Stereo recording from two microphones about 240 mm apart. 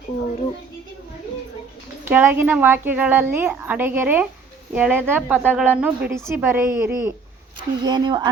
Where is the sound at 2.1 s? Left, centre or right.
Centre.